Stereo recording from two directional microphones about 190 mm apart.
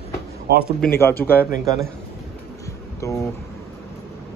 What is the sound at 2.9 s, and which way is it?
Speech, 15° left (ahead or behind).